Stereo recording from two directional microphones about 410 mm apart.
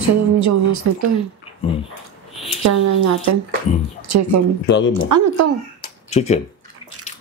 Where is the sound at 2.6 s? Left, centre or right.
Right.